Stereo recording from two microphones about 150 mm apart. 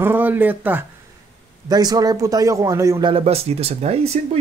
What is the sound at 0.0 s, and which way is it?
Speech, 10° right (ahead or behind).